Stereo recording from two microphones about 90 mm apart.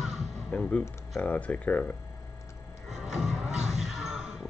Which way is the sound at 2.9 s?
5° right (ahead or behind).